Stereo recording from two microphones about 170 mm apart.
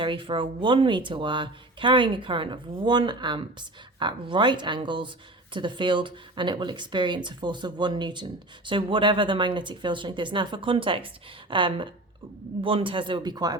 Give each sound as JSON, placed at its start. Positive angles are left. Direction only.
{"t": 0.0, "sound": "speech", "side_deg": -30}